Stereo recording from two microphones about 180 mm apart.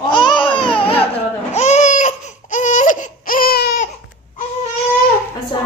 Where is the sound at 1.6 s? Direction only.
40° left (ahead or behind); by 3.9 s 55° left (ahead or behind).